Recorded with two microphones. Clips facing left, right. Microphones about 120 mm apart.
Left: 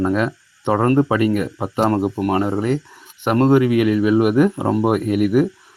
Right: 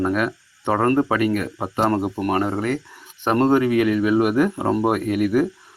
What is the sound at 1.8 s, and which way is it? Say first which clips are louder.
Speech: left 3 dB; 10° left (ahead or behind).